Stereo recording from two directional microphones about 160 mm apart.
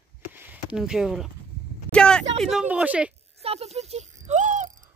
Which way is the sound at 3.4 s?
40° right (ahead or behind).